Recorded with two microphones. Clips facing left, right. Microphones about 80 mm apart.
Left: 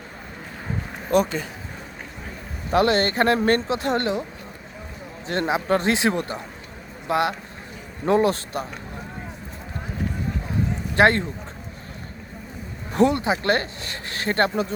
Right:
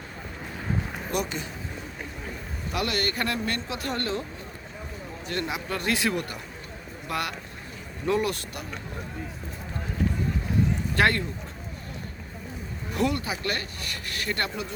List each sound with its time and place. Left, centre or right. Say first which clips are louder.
1.1 s speech: left 10 dB; left
2.7 s speech: left 10 dB; left
3.7 s speech: left 7 dB; left
5.3 s speech: left 9 dB; left
10.9 s speech: left 7 dB; left
12.9 s speech: left 8 dB; left